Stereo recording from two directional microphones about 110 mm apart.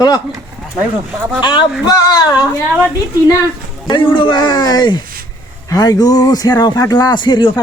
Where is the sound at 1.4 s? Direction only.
40° left (ahead or behind).